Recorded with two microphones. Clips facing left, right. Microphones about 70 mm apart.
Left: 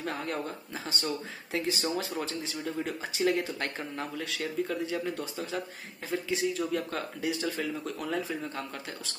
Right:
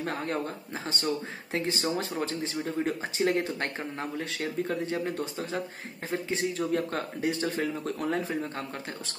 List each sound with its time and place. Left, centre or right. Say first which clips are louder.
0.0 s speech: right 2 dB; right